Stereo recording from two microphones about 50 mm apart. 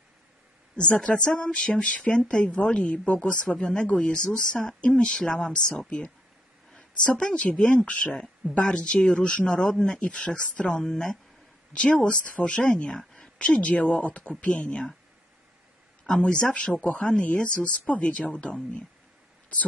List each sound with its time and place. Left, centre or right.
0.7 s speech: centre
8.1 s speech: centre
8.5 s speech: left
10.8 s speech: centre
11.7 s speech: left
16.1 s speech: centre